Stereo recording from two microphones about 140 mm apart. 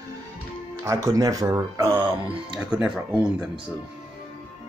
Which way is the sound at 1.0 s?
25° right (ahead or behind).